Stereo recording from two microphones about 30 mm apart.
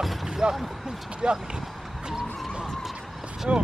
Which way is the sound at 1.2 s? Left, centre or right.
Right.